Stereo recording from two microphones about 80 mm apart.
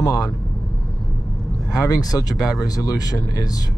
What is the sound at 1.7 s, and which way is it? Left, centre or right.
Speech, left.